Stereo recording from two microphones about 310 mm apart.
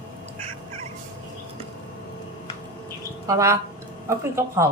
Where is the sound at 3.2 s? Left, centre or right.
Centre.